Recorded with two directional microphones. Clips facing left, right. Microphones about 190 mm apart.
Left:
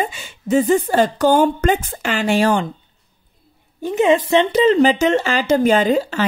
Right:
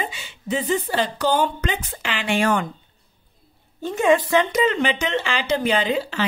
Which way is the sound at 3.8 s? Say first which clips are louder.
Left 3 dB; 20° left (ahead or behind).